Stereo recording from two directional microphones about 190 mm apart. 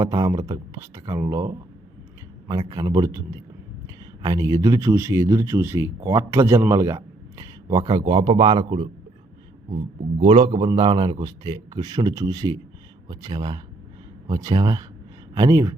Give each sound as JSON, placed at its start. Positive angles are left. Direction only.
{"t": 0.0, "sound": "a man's voice", "side_deg": -20}